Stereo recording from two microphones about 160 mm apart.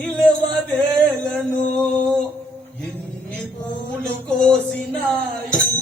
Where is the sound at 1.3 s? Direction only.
5° left (ahead or behind).